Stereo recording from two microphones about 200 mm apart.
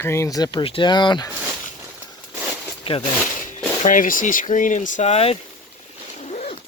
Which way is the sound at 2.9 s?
25° left (ahead or behind).